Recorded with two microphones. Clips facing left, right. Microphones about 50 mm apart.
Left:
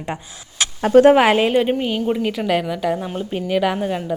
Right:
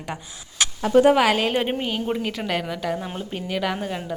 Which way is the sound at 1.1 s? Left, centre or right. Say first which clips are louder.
Left 5 dB; left.